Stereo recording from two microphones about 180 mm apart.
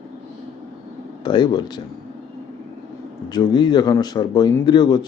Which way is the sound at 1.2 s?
25° left (ahead or behind).